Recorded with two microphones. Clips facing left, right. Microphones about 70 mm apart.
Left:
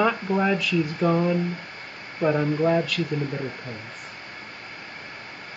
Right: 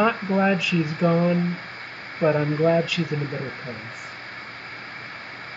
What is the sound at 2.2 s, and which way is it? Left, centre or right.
Speech, centre.